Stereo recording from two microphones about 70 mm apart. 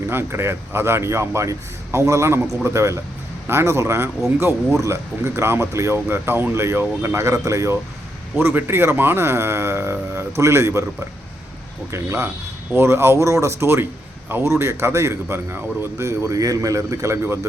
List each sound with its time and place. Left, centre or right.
0.1 s speech: right
8.4 s speech: right
11.9 s speech: right